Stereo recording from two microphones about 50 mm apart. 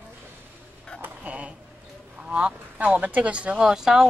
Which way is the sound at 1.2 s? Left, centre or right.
Right.